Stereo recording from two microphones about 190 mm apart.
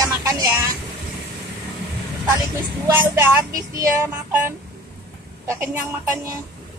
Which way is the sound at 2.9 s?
15° right (ahead or behind).